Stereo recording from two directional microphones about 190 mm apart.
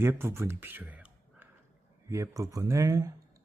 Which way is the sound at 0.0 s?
15° right (ahead or behind).